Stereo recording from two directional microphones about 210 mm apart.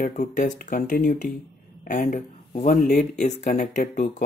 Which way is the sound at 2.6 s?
45° left (ahead or behind).